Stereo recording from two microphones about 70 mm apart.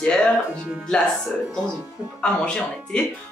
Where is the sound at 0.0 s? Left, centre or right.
Centre.